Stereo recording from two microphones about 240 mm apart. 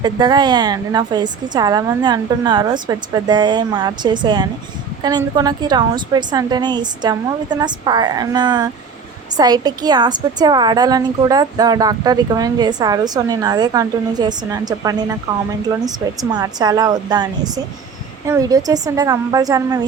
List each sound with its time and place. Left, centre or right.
0.0 s a woman's voice: centre